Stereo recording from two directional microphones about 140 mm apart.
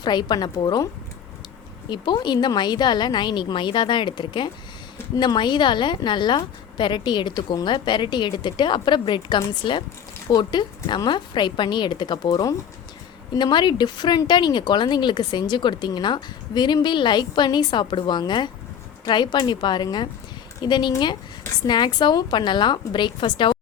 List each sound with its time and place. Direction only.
0.0 s speech: 30° left (ahead or behind)
1.9 s speech: 35° left (ahead or behind)